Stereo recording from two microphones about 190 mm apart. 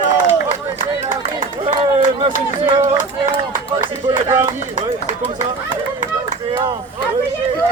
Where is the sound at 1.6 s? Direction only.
25° right (ahead or behind).